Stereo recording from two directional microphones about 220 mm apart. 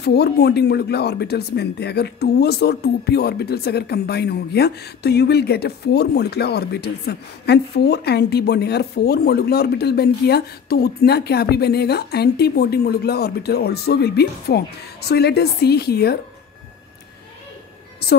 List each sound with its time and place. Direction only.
0.0 s speech: 50° left (ahead or behind)